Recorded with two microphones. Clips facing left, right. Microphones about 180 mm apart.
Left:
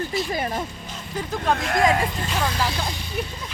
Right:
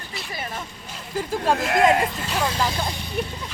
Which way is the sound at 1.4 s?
25° right (ahead or behind).